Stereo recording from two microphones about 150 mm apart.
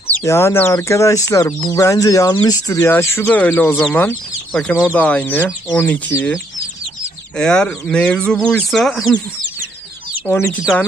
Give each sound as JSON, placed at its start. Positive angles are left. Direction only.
{"t": 0.2, "sound": "speech", "side_deg": 20}
{"t": 7.3, "sound": "speech", "side_deg": 5}
{"t": 10.2, "sound": "speech", "side_deg": 15}